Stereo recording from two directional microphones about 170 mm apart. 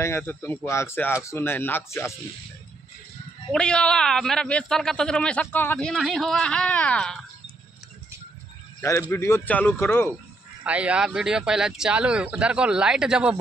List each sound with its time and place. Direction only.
0.0 s speech: 15° left (ahead or behind)
3.5 s speech: 5° left (ahead or behind)
9.1 s speech: 15° left (ahead or behind)
10.6 s speech: 5° right (ahead or behind)